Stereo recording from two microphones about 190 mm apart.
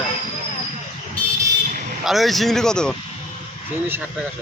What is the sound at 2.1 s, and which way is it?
Speech, centre (ahead or behind).